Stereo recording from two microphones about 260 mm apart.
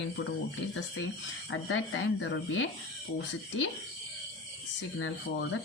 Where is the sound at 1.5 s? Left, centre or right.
Left.